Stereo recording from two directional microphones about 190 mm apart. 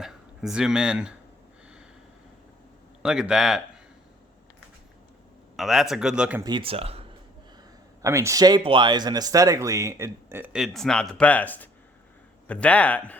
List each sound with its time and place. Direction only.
0.0 s speech: centre (ahead or behind)
3.0 s speech: 5° right (ahead or behind)
5.5 s speech: centre (ahead or behind)
6.4 s speech: 25° right (ahead or behind)
8.0 s a man's voice: 15° right (ahead or behind); by 13.1 s 10° left (ahead or behind)